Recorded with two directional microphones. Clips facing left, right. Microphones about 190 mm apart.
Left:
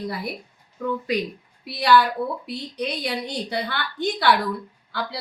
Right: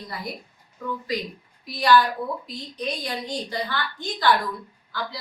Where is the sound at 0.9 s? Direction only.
65° left (ahead or behind).